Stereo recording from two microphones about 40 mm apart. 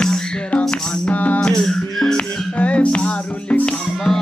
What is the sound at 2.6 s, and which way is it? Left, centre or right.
Music, left.